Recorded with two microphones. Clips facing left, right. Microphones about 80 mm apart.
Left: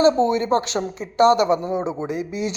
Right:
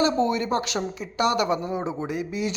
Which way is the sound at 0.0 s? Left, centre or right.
Left.